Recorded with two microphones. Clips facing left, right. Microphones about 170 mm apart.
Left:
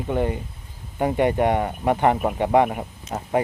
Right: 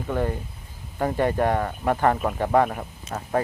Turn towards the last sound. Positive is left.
turn(degrees=15)  # may be behind; listen again after turning